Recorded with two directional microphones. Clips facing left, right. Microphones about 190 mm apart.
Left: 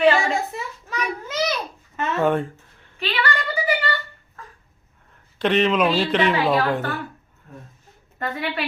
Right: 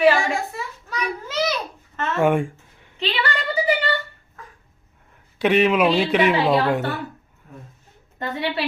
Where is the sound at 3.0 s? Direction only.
25° right (ahead or behind).